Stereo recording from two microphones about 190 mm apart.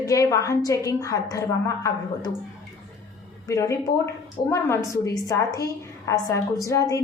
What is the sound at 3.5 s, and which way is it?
A woman's voice, 15° left (ahead or behind).